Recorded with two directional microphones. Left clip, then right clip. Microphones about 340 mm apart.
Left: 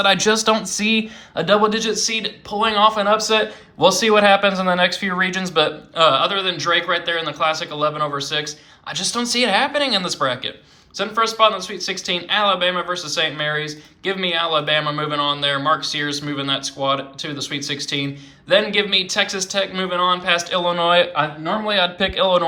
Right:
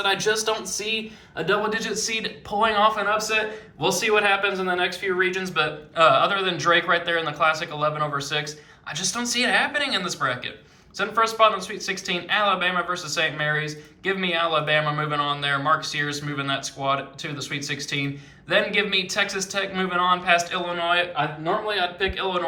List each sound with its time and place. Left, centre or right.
0.0 s speech: centre